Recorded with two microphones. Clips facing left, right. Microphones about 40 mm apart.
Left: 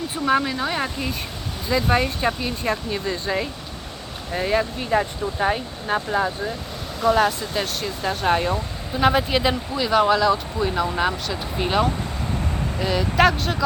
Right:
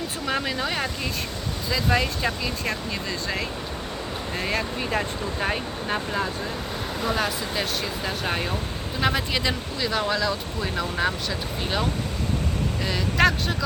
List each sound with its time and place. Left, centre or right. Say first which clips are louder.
0.4 s speech: left 2 dB; centre
1.7 s speech: left 4 dB; left
4.9 s speech: left 5 dB; centre